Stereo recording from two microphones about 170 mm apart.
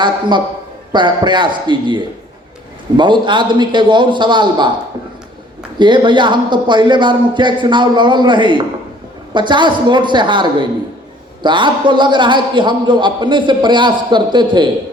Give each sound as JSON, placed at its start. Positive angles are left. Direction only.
{"t": 0.0, "sound": "a man's voice", "side_deg": -25}
{"t": 3.0, "sound": "a man's voice", "side_deg": -25}
{"t": 5.8, "sound": "a man's voice", "side_deg": -25}